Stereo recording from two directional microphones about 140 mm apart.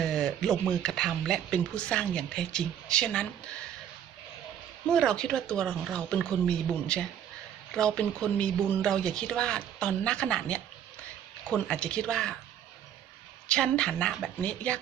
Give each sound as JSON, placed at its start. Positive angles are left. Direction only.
{"t": 0.0, "sound": "a sound", "side_deg": 5}
{"t": 0.7, "sound": "speech", "side_deg": 5}
{"t": 4.9, "sound": "a woman's voice", "side_deg": 5}
{"t": 13.5, "sound": "a woman's voice", "side_deg": 5}